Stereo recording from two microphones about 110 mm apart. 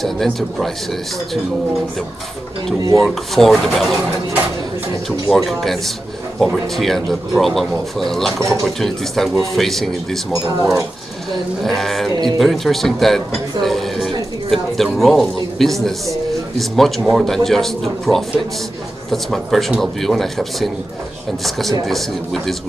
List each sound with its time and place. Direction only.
0.0 s speech: centre (ahead or behind)
3.0 s speech: centre (ahead or behind)
5.3 s speech: centre (ahead or behind)
11.6 s a woman's voice: centre (ahead or behind)